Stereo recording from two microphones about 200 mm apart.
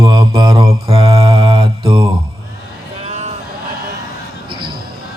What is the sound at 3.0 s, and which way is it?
Vehicle, 30° right (ahead or behind).